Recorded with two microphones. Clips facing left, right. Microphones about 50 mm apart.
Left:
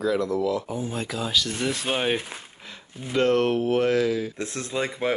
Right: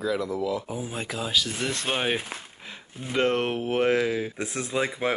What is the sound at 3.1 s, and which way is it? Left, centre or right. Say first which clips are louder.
Speech: left 3 dB; centre.